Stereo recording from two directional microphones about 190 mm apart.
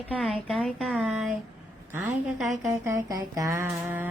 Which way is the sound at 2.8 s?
15° right (ahead or behind).